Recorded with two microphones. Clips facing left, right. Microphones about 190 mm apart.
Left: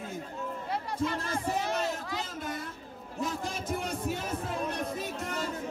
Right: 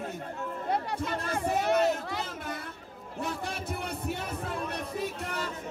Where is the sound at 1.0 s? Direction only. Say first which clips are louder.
Even; 60° right (ahead or behind).